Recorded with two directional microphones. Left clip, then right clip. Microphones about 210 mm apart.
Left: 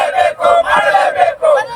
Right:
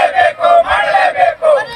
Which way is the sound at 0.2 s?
25° left (ahead or behind).